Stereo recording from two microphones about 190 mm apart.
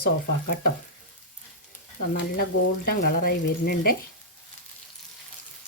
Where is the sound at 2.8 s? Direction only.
50° left (ahead or behind).